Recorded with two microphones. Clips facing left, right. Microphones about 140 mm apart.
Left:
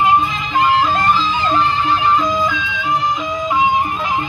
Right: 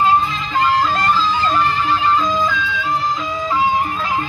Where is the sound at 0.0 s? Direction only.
15° left (ahead or behind).